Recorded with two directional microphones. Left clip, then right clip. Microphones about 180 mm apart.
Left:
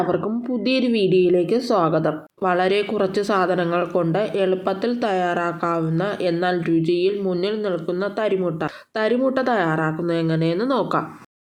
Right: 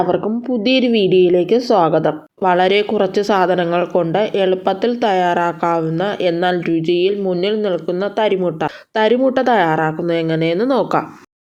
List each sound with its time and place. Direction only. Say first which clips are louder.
0.1 s speech: right 5 dB; 25° right (ahead or behind)